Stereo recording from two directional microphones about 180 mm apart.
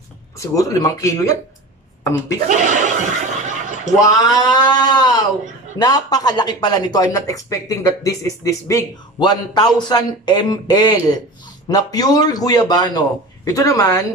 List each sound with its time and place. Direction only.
0.4 s speech: 20° left (ahead or behind)
2.4 s chuckle: 45° right (ahead or behind)
4.0 s speech: 20° left (ahead or behind)